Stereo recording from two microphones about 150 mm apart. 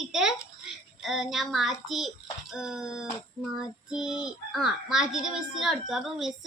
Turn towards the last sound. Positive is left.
turn(degrees=0)  # may be behind; listen again after turning